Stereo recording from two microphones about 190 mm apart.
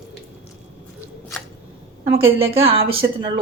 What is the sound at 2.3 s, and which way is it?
Speech, 30° right (ahead or behind).